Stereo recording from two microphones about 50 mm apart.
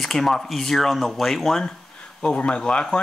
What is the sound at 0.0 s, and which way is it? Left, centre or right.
Speech, centre.